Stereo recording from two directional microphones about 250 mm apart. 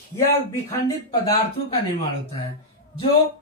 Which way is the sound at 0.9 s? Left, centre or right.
Centre.